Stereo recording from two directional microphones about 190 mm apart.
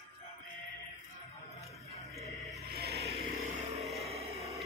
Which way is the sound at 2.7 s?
55° right (ahead or behind).